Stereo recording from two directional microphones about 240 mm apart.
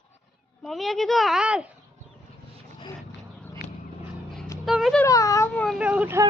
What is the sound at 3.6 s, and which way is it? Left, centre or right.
Vehicle, left.